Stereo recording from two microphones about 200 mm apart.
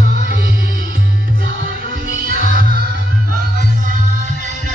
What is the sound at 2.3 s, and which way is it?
Music, 45° right (ahead or behind).